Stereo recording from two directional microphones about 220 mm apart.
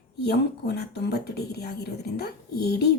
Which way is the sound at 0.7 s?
50° left (ahead or behind).